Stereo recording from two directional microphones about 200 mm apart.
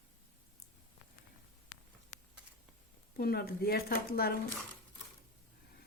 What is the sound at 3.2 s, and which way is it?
Speech, 50° left (ahead or behind).